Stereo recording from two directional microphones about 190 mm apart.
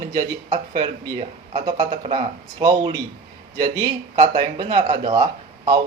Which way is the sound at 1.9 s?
35° right (ahead or behind).